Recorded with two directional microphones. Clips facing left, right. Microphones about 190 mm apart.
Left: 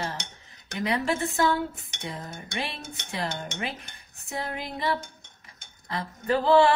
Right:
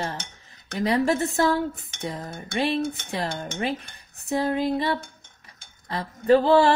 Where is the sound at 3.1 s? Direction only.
35° right (ahead or behind).